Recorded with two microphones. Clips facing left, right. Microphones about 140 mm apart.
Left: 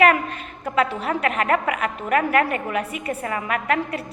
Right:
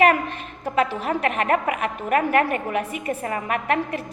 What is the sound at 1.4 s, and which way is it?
A woman's voice, 35° right (ahead or behind).